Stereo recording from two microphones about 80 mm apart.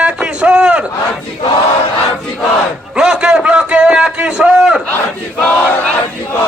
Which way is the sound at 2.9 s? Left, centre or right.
Centre.